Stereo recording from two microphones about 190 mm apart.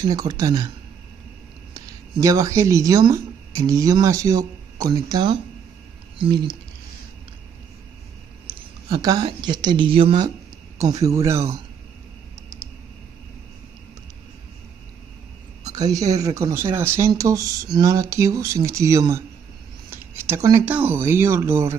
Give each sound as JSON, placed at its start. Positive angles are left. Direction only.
{"t": 0.0, "sound": "speech", "side_deg": -20}
{"t": 1.7, "sound": "speech", "side_deg": -15}
{"t": 8.5, "sound": "speech", "side_deg": -20}
{"t": 15.6, "sound": "speech", "side_deg": -20}